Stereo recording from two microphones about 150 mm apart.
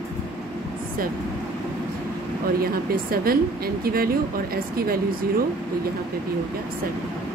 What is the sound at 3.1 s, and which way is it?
Speech, 80° right.